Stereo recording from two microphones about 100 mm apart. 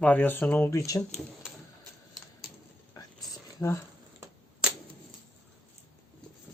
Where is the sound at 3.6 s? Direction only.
25° left (ahead or behind).